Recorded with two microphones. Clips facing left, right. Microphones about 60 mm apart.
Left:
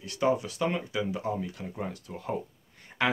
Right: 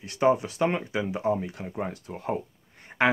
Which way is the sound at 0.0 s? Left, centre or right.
Right.